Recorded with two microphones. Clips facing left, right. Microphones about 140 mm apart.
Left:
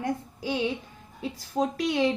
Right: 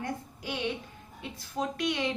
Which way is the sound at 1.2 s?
35° left (ahead or behind).